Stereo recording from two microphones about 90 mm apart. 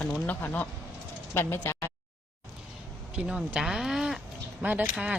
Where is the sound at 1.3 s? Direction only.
25° left (ahead or behind).